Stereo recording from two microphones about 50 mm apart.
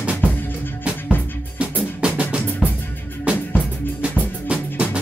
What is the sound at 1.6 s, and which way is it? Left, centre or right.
Drum, right.